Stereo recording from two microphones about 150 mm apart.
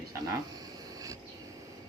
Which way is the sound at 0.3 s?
25° right (ahead or behind).